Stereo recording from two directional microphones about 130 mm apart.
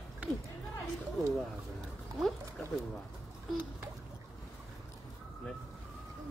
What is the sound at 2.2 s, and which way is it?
Music, centre (ahead or behind).